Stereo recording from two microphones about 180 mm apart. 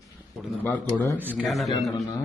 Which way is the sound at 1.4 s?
Centre (ahead or behind).